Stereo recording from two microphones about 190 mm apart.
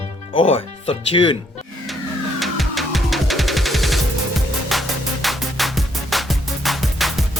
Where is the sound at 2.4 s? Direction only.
Centre (ahead or behind).